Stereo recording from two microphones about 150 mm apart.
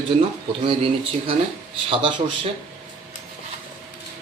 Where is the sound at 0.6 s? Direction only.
40° right (ahead or behind).